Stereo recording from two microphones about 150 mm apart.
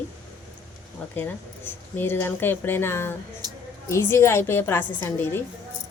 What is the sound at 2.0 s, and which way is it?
Speech, 15° left (ahead or behind).